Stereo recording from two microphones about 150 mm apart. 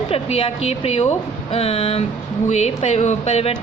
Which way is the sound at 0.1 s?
40° left (ahead or behind).